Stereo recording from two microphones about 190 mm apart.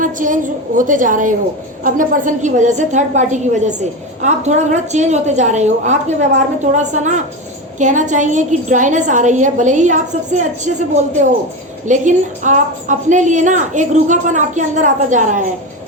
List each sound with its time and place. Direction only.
0.0 s a woman's voice: 45° right (ahead or behind)